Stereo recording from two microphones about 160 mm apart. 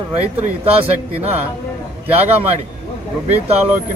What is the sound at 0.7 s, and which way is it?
Speech, 40° right (ahead or behind).